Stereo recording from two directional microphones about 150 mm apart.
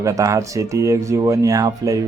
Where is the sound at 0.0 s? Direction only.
20° right (ahead or behind).